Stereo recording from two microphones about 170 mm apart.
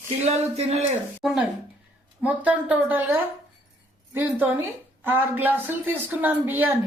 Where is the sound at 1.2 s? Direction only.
Centre (ahead or behind).